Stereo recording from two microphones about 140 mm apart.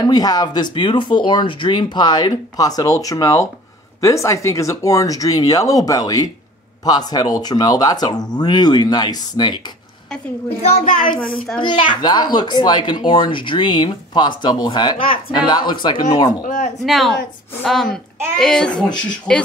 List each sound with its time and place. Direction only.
0.0 s speech: 25° left (ahead or behind)
11.6 s a child's voice: 35° left (ahead or behind)
16.4 s speech: 70° left (ahead or behind)
16.8 s a woman's voice: centre (ahead or behind)